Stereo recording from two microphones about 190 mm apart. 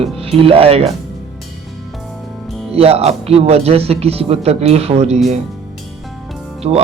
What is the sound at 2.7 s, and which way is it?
Speech, 30° right (ahead or behind).